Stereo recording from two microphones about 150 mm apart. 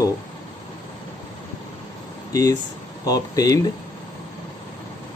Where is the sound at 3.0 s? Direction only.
25° left (ahead or behind).